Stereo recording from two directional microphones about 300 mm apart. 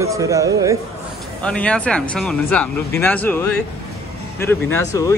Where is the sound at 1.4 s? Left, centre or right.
Centre.